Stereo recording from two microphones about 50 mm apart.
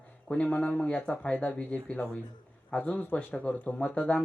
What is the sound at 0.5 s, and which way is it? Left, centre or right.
Speech, left.